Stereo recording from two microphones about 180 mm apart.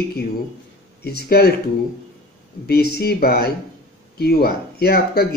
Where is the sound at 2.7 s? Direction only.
60° left (ahead or behind).